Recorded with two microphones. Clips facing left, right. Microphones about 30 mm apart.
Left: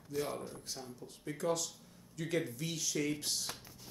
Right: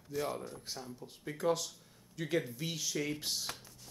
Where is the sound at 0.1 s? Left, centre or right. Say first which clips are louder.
Right 1 dB; centre.